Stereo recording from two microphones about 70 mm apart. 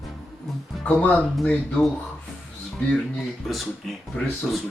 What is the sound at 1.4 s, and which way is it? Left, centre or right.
Speech, centre.